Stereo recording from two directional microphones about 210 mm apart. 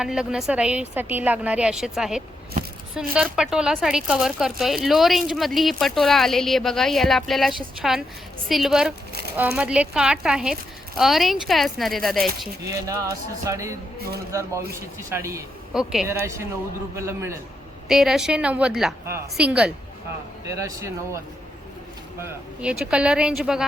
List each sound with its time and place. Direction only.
0.0 s speech: 5° right (ahead or behind)
2.6 s speech: 35° right (ahead or behind)
2.9 s speech: centre (ahead or behind)
12.6 s a man's voice: 15° right (ahead or behind)
15.7 s speech: centre (ahead or behind)
16.2 s a man's voice: 15° right (ahead or behind)
17.8 s a man's voice: centre (ahead or behind)
22.2 s speech: 5° right (ahead or behind)